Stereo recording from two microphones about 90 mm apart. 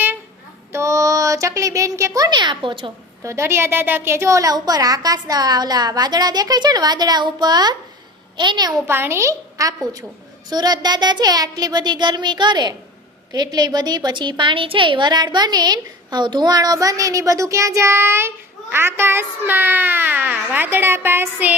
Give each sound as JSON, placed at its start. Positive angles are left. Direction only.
{"t": 0.7, "sound": "a sound", "side_deg": -35}
{"t": 2.3, "sound": "a woman's voice", "side_deg": -60}
{"t": 3.2, "sound": "a woman's voice", "side_deg": -30}
{"t": 8.9, "sound": "a woman's voice", "side_deg": -25}
{"t": 10.5, "sound": "a woman's voice", "side_deg": -50}